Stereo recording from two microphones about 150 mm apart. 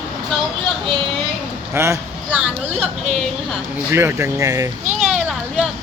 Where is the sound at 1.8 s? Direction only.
15° right (ahead or behind).